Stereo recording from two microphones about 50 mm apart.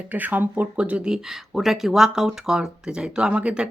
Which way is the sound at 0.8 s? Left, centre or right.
Right.